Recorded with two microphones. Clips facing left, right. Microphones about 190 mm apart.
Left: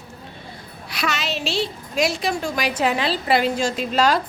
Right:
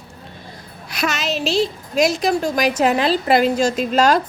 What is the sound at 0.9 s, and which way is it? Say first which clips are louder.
A woman's voice: right 3 dB; 45° right (ahead or behind).